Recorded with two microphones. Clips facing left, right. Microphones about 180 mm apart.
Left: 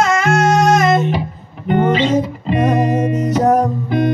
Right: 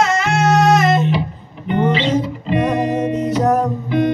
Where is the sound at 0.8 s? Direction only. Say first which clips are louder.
Left 1 dB; 45° left (ahead or behind).